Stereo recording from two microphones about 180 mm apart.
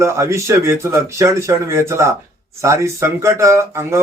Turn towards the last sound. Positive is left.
turn(degrees=-15)  # may be behind; listen again after turning